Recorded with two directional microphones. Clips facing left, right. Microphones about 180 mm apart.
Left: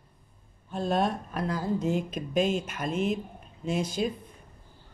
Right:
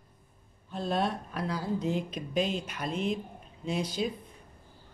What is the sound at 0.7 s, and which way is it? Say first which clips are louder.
Speech: left 3 dB; 50° left (ahead or behind).